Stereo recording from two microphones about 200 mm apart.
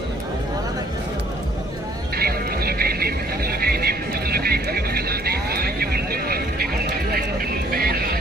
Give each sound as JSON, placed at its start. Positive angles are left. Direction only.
{"t": 2.1, "sound": "music", "side_deg": -50}
{"t": 7.7, "sound": "vehicle", "side_deg": -50}